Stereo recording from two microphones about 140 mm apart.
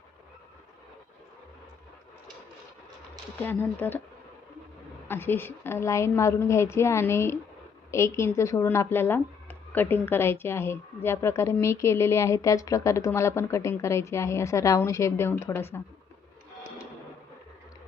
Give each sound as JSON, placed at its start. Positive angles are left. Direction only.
{"t": 3.4, "sound": "speech", "side_deg": 15}
{"t": 5.0, "sound": "speech", "side_deg": 15}